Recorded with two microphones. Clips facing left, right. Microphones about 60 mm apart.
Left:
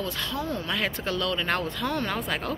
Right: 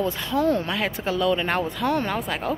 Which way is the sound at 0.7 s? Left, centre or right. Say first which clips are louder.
Right 3 dB; centre.